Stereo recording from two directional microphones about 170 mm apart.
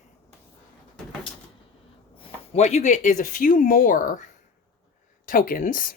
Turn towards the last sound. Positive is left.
turn(degrees=55)  # may be behind; listen again after turning